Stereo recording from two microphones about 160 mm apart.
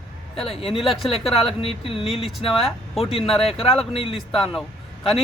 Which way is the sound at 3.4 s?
35° left (ahead or behind).